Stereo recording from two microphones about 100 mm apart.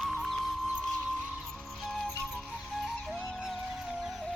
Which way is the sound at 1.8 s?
Centre (ahead or behind).